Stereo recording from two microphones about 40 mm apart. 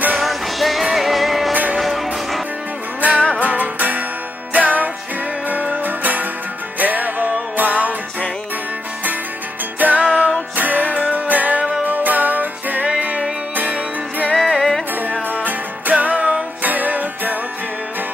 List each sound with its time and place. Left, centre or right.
0.2 s music: centre
1.5 s music: right
1.8 s music: centre
3.0 s music: right
9.9 s music: right
14.3 s music: centre
15.3 s music: right